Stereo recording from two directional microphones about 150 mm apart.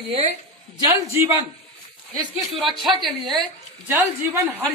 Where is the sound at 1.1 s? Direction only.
15° right (ahead or behind).